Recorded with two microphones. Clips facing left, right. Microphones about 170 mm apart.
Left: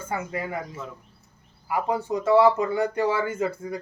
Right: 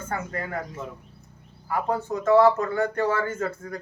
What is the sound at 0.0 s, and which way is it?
Speech, 10° left (ahead or behind).